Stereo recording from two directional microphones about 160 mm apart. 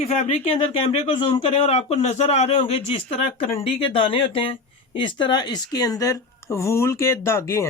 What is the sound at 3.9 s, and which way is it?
Speech, 35° left (ahead or behind).